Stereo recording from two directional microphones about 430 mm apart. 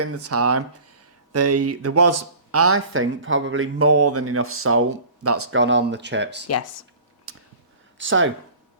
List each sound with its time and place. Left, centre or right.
0.0 s speech: right
7.3 s a sound: right
7.9 s speech: right